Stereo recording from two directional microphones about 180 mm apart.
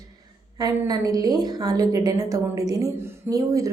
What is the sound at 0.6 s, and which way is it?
A woman's voice, 20° right (ahead or behind).